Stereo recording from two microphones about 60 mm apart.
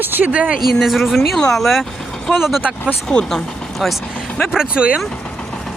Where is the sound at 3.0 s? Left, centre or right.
Centre.